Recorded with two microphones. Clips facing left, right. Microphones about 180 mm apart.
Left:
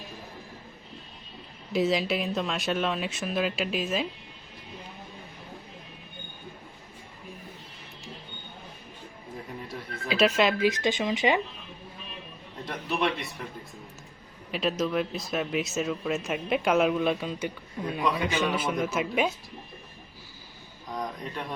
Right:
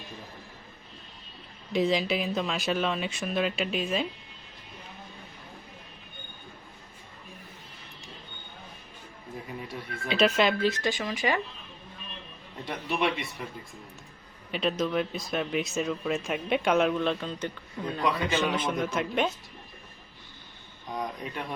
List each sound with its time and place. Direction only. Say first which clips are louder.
1.7 s speech: even; centre (ahead or behind)
10.1 s speech: left 1 dB; centre (ahead or behind)
10.6 s speech: left 2 dB; 15° left (ahead or behind)
12.6 s speech: even; centre (ahead or behind)
14.5 s speech: even; centre (ahead or behind)
20.9 s a sound: even; 5° right (ahead or behind)